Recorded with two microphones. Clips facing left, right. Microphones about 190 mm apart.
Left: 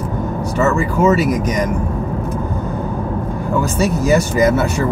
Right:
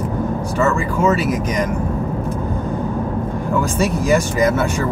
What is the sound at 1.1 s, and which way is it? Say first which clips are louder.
Speech: left 3 dB; 40° left (ahead or behind).